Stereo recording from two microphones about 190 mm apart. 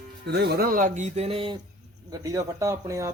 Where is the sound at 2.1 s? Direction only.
15° right (ahead or behind).